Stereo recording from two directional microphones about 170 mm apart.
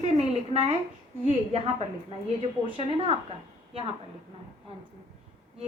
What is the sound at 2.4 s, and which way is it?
Speech, 35° right (ahead or behind).